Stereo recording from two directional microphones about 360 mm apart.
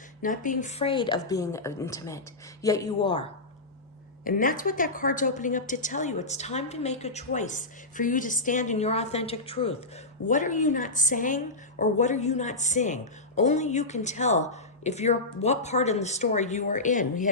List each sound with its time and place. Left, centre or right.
0.2 s speech: left
4.2 s a woman's voice: left